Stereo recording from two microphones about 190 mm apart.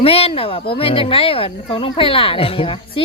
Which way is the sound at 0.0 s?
30° left (ahead or behind).